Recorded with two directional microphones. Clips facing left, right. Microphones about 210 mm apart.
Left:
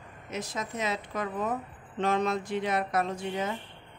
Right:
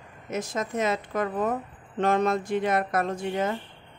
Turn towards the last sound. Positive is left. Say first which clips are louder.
# right 4 dB
turn(degrees=-50)  # may be behind; listen again after turning